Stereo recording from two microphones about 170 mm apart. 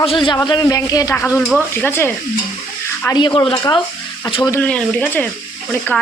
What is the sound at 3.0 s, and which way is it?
Speech, 25° left (ahead or behind).